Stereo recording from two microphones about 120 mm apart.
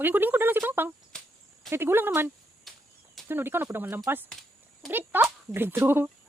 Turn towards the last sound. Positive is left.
turn(degrees=-15)  # may be behind; listen again after turning